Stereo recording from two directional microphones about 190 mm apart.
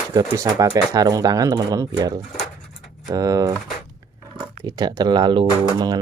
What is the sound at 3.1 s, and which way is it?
Speech, 15° right (ahead or behind).